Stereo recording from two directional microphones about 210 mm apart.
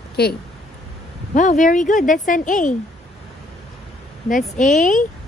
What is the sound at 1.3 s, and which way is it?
A woman's voice, 35° left (ahead or behind).